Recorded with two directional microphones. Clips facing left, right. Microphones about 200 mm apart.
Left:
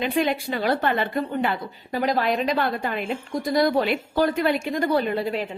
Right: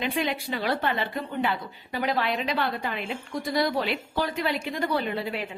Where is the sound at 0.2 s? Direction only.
45° left (ahead or behind).